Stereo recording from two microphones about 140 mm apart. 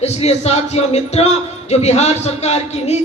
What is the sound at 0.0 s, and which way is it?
Speech, 50° left (ahead or behind).